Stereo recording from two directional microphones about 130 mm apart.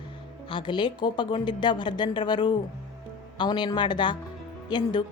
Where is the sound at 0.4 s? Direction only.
40° left (ahead or behind).